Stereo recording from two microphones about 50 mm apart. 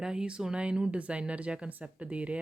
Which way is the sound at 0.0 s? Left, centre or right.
Centre.